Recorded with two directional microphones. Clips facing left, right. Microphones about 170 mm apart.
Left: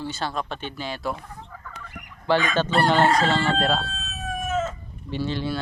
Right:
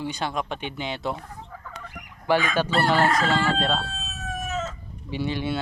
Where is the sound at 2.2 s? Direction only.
10° right (ahead or behind).